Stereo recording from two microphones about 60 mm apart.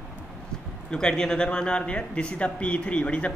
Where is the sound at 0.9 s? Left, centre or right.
Centre.